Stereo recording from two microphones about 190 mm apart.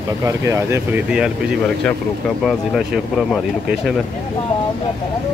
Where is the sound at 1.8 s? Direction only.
5° left (ahead or behind).